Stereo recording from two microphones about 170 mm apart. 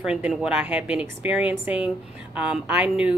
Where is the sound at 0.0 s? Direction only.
5° right (ahead or behind).